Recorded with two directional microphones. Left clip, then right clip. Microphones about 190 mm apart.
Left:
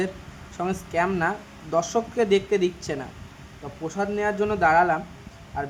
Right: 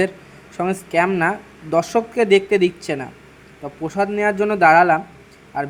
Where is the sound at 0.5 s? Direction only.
25° right (ahead or behind).